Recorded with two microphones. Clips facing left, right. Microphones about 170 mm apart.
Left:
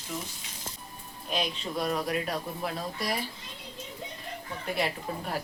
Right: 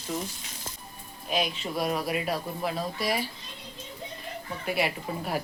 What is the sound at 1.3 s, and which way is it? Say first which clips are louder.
A woman's voice: right 3 dB; 5° right (ahead or behind).